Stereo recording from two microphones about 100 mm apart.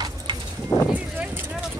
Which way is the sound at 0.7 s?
35° left (ahead or behind).